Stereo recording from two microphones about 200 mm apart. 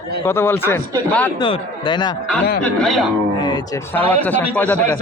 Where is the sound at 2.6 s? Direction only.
Centre (ahead or behind).